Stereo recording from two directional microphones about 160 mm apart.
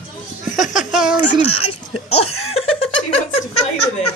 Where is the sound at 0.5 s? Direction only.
50° left (ahead or behind).